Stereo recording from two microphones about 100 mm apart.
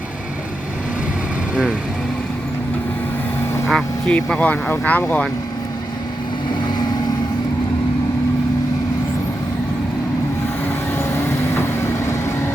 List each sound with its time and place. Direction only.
3.7 s speech: 5° left (ahead or behind)
10.9 s vehicle: 25° left (ahead or behind)